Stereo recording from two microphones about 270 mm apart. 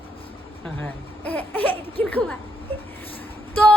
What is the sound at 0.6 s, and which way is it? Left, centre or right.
Speech, centre.